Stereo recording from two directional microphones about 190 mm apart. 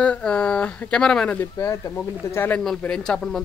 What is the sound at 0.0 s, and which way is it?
Speech, 5° left (ahead or behind).